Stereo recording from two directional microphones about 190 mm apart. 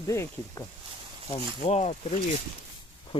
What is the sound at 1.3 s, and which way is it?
Speech, 35° left (ahead or behind).